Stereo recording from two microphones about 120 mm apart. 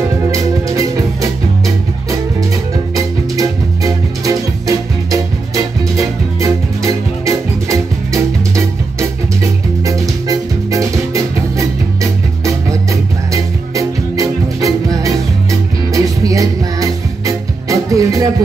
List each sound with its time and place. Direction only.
0.3 s music: 25° right (ahead or behind)
3.3 s music: 30° right (ahead or behind)